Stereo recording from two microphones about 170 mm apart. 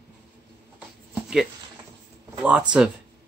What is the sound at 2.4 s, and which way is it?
Speech, 5° right (ahead or behind).